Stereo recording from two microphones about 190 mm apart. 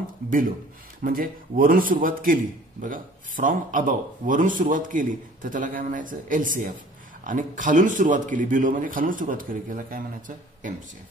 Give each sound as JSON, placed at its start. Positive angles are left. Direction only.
{"t": 1.0, "sound": "a man's voice", "side_deg": -50}